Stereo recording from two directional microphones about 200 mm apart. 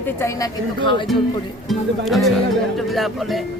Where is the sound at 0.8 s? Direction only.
25° left (ahead or behind).